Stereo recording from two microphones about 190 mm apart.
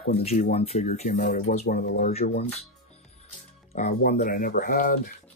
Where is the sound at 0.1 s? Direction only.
35° left (ahead or behind).